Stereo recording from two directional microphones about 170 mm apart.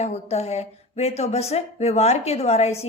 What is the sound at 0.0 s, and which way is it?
Speech, 40° left (ahead or behind).